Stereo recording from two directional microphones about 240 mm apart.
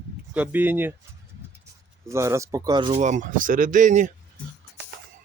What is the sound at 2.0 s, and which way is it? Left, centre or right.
Speech, centre.